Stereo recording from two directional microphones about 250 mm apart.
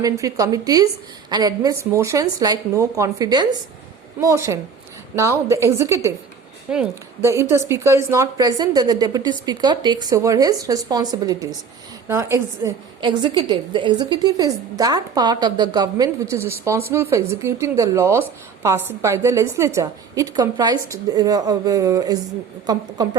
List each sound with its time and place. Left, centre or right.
0.0 s a woman's voice: centre
5.1 s a woman's voice: centre